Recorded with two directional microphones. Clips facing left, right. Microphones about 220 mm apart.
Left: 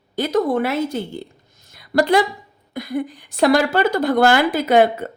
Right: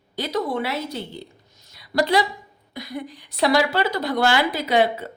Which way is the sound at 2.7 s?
50° left (ahead or behind).